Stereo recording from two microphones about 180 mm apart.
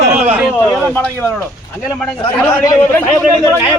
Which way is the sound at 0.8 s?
10° left (ahead or behind).